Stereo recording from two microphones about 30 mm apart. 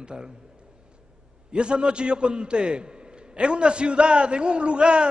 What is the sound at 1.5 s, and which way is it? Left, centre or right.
A man's voice, right.